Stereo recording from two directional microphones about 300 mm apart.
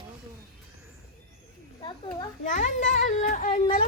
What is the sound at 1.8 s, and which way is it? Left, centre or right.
Children playing, centre.